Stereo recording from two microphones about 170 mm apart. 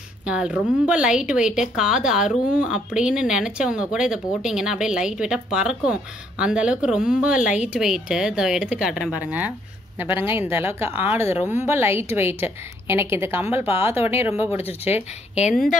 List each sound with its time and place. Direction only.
0.2 s a woman's voice: 5° right (ahead or behind)
14.6 s speech: 35° left (ahead or behind)